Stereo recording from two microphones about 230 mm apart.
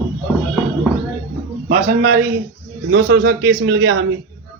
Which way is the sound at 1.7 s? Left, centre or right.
Right.